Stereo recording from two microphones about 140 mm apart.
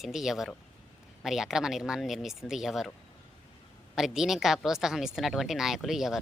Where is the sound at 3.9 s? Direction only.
5° right (ahead or behind).